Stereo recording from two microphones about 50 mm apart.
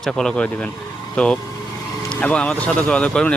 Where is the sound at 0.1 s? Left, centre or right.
Centre.